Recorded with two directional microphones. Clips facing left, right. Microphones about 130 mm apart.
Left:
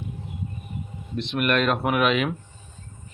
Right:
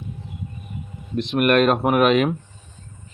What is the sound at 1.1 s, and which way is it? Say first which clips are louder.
Speech: right 6 dB; 45° right (ahead or behind).